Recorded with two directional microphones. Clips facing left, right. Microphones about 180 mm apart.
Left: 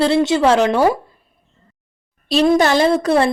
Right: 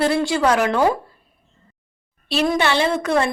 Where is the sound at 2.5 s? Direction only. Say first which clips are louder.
Left 5 dB; 40° left (ahead or behind).